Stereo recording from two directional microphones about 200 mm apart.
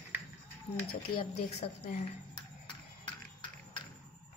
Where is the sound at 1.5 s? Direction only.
35° left (ahead or behind).